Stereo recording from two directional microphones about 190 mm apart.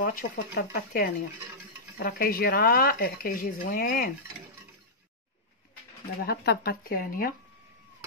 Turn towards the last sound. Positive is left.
turn(degrees=50)  # may be behind; listen again after turning